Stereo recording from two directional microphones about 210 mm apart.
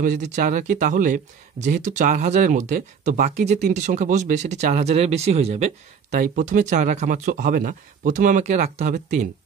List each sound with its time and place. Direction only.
0.0 s speech: 40° right (ahead or behind)